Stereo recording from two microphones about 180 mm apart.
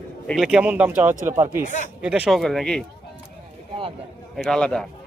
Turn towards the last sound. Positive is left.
turn(degrees=5)  # may be behind; listen again after turning